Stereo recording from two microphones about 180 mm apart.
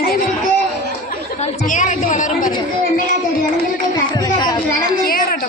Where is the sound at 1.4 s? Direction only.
45° left (ahead or behind).